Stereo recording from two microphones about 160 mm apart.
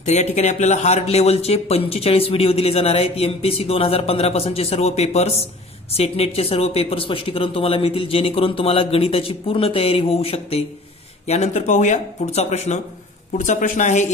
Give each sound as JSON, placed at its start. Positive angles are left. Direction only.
{"t": 0.0, "sound": "speech", "side_deg": 45}